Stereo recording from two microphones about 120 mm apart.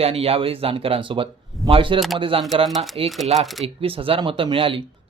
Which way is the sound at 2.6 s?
Centre (ahead or behind).